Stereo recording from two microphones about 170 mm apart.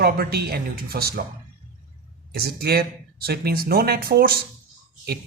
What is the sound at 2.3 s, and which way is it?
Speech, 65° right (ahead or behind).